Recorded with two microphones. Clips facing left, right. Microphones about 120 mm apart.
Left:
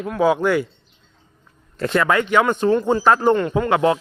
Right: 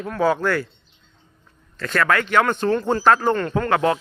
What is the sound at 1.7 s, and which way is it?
Speech, 30° left (ahead or behind).